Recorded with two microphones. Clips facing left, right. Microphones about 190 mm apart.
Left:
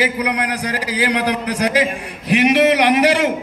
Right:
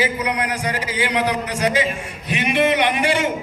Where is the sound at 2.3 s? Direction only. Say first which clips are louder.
Left 5 dB; 75° left (ahead or behind).